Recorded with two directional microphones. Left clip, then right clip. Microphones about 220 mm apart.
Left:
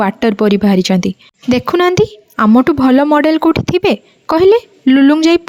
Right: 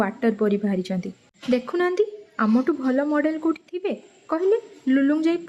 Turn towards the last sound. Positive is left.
turn(degrees=45)  # may be behind; listen again after turning